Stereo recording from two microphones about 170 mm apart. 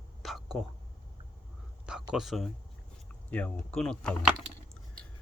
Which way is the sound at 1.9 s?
5° right (ahead or behind).